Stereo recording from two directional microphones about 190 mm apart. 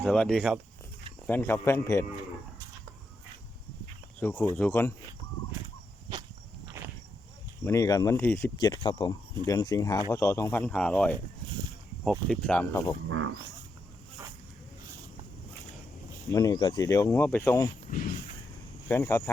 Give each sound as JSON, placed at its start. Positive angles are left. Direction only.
{"t": 0.0, "sound": "speech", "side_deg": 5}
{"t": 1.3, "sound": "speech", "side_deg": 10}
{"t": 4.2, "sound": "speech", "side_deg": 10}
{"t": 7.6, "sound": "speech", "side_deg": 15}
{"t": 8.5, "sound": "speech", "side_deg": 25}
{"t": 12.3, "sound": "speech", "side_deg": 5}
{"t": 13.1, "sound": "speech", "side_deg": -90}
{"t": 16.3, "sound": "speech", "side_deg": 20}
{"t": 17.9, "sound": "speech", "side_deg": 45}
{"t": 18.9, "sound": "speech", "side_deg": 15}